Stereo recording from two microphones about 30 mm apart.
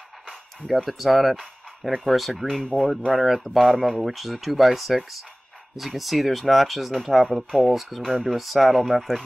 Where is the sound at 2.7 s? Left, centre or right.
Right.